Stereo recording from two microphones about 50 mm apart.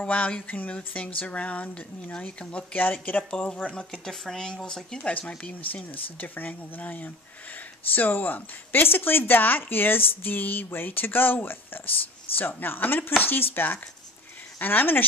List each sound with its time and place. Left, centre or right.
0.0 s speech: left
2.7 s speech: left
3.3 s speech: left
3.7 s speech: centre
4.9 s speech: left